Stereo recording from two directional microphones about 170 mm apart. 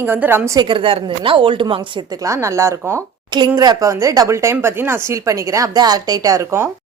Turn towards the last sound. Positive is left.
turn(degrees=-15)  # may be behind; listen again after turning